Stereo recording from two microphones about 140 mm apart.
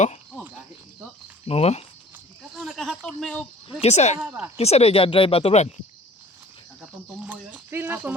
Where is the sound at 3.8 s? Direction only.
50° left (ahead or behind).